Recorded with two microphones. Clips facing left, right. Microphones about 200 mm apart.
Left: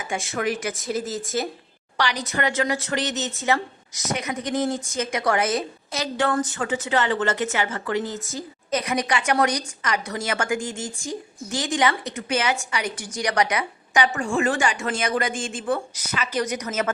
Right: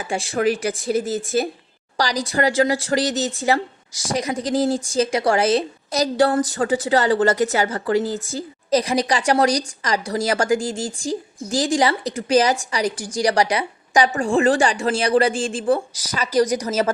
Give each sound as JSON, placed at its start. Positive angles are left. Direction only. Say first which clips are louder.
{"t": 0.0, "sound": "a woman's voice", "louder": "right 6 dB", "side_deg": -30}